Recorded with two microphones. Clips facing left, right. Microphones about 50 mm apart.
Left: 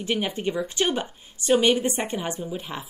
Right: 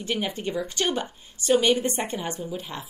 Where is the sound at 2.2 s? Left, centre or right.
Centre.